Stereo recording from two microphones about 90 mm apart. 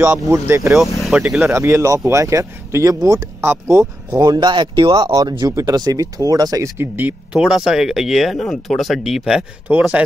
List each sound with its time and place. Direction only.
0.3 s speech: 35° right (ahead or behind)
1.0 s speech: 5° right (ahead or behind)
1.4 s speech: 30° right (ahead or behind)
3.3 s speech: 30° right (ahead or behind); by 4.9 s 65° right (ahead or behind)
4.9 s speech: 50° right (ahead or behind)
5.5 s speech: 40° right (ahead or behind)
6.8 s speech: 20° right (ahead or behind)
7.3 s speech: 5° right (ahead or behind)
9.7 s speech: 15° right (ahead or behind)